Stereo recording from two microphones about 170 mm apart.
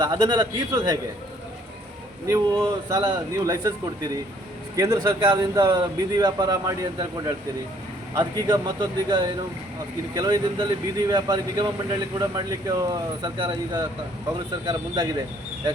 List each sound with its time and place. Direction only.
0.0 s speech: 25° right (ahead or behind)
2.2 s a man's voice: 20° right (ahead or behind)